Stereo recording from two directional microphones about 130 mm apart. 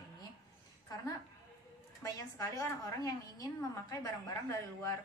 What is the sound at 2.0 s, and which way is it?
A woman's voice, 25° left (ahead or behind).